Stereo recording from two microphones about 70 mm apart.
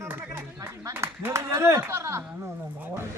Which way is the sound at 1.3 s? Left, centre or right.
Right.